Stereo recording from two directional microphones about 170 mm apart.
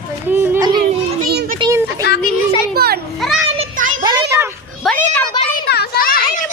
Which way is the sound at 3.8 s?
50° right (ahead or behind).